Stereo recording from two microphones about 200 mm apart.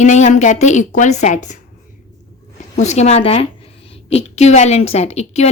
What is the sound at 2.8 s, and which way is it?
A woman's voice, 35° left (ahead or behind).